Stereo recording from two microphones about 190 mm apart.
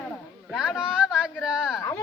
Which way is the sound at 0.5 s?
5° right (ahead or behind).